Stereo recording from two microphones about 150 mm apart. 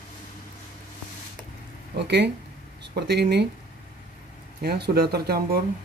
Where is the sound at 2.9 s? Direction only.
90° right.